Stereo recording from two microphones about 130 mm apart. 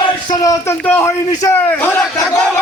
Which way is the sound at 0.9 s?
20° left (ahead or behind).